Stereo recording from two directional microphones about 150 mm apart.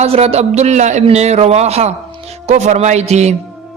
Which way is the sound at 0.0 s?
45° right (ahead or behind).